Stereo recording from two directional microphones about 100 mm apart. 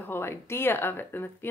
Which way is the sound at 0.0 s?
25° left (ahead or behind).